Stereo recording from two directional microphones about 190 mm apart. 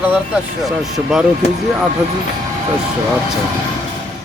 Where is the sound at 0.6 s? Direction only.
Centre (ahead or behind).